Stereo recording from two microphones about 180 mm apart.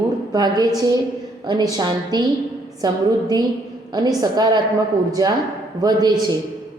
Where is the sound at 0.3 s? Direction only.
20° right (ahead or behind).